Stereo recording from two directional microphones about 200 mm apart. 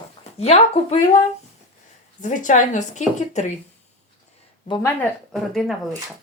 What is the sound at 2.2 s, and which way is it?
A woman's voice, 40° left (ahead or behind).